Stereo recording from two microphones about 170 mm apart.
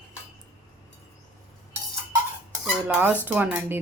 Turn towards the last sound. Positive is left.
turn(degrees=-10)  # may be behind; listen again after turning